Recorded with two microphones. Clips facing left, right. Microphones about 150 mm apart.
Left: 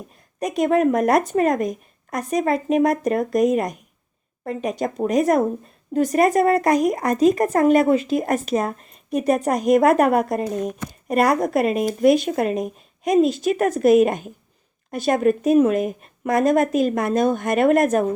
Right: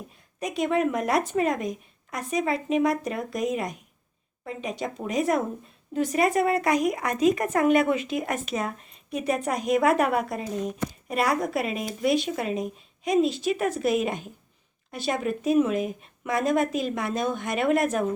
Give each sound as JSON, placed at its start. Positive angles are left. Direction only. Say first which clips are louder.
{"t": 0.3, "sound": "speech", "louder": "left 6 dB", "side_deg": 45}